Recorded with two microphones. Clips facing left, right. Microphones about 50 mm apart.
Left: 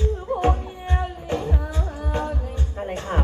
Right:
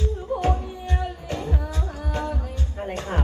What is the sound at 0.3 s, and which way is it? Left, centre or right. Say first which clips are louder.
Music: left 1 dB; left.